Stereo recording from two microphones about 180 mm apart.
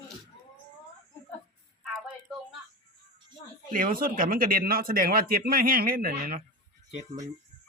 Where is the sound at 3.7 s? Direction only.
50° right (ahead or behind).